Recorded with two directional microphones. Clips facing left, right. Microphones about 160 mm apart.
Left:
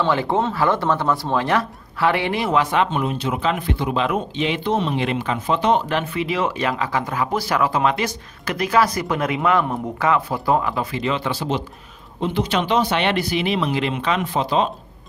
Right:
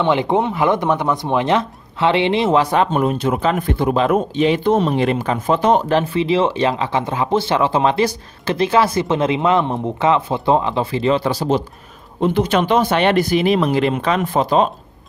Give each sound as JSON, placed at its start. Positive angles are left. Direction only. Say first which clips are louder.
{"t": 0.0, "sound": "speech", "louder": "right 3 dB", "side_deg": -20}
{"t": 12.2, "sound": "speech", "louder": "right 5 dB", "side_deg": -50}